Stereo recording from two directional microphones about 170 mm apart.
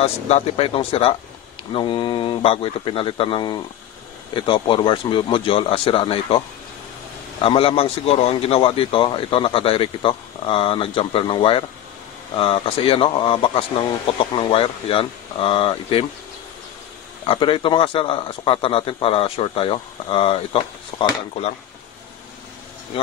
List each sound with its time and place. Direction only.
0.0 s a man's voice: 35° left (ahead or behind)
7.4 s a man's voice: 35° left (ahead or behind)
17.3 s a man's voice: 30° left (ahead or behind)